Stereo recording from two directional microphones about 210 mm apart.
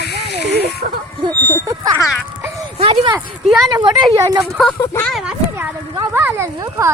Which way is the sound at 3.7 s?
20° right (ahead or behind).